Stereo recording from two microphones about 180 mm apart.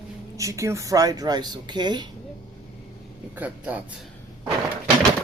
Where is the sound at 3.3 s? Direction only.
10° right (ahead or behind).